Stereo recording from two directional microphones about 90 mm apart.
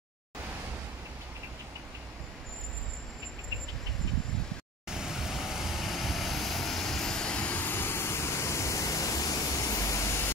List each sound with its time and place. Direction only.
4.8 s vehicle: 5° right (ahead or behind); by 10.3 s 30° left (ahead or behind)